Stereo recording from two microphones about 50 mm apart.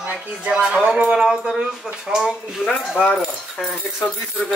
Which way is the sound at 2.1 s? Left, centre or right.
Right.